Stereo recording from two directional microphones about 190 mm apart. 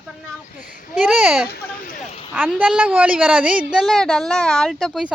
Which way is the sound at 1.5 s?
50° left (ahead or behind).